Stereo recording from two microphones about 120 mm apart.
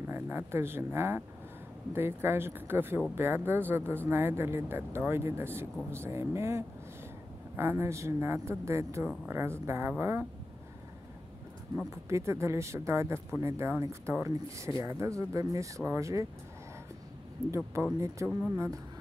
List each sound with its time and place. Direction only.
0.0 s speech: 20° right (ahead or behind)
11.9 s speech: 25° right (ahead or behind)
17.5 s speech: 25° right (ahead or behind)